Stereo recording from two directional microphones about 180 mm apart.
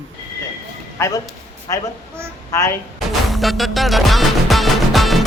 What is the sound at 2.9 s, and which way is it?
Music, centre (ahead or behind).